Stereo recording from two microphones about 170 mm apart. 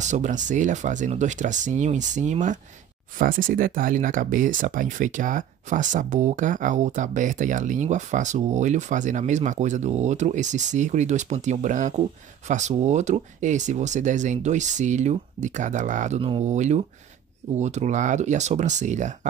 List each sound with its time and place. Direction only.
0.0 s speech: 45° right (ahead or behind)